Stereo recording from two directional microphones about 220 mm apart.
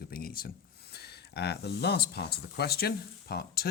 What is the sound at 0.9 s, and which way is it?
Speech, 50° left (ahead or behind).